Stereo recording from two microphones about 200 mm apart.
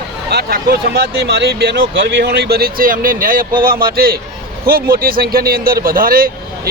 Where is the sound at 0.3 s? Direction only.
55° right (ahead or behind).